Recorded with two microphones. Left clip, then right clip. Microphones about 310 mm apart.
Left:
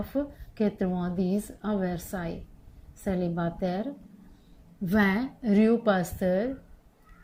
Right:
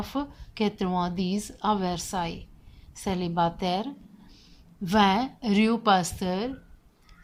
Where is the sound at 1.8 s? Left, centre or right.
Centre.